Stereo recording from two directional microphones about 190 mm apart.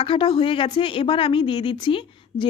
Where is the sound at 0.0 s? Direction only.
30° left (ahead or behind).